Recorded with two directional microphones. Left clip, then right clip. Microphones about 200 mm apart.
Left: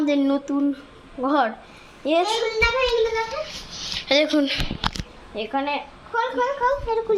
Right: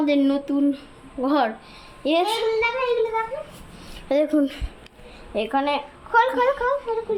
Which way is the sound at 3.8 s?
15° right (ahead or behind).